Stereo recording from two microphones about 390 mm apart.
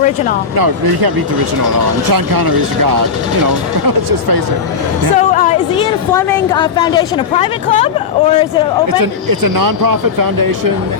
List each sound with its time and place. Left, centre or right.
0.5 s speech: right
2.1 s speech: right
5.1 s a woman's voice: centre
9.4 s speech: right